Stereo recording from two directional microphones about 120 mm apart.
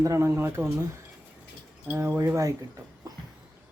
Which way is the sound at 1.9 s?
20° right (ahead or behind).